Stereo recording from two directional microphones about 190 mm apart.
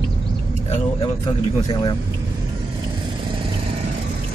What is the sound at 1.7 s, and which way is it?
Speech, 25° left (ahead or behind).